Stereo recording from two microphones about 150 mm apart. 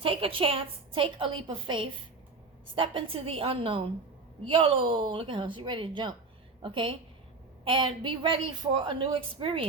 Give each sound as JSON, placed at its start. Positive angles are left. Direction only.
{"t": 0.0, "sound": "a woman's voice", "side_deg": -35}